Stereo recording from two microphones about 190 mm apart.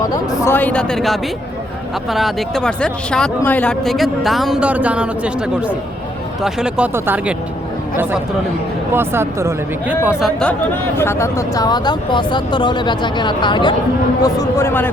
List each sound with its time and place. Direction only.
0.3 s speech: 10° left (ahead or behind); by 7.3 s 10° right (ahead or behind)
8.9 s speech: 10° right (ahead or behind)
10.9 s a man's voice: 15° left (ahead or behind)